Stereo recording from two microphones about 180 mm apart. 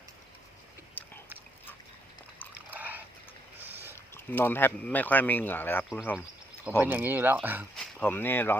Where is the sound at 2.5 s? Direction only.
10° right (ahead or behind).